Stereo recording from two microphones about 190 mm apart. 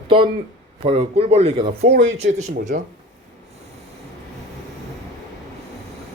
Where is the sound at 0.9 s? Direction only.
30° right (ahead or behind).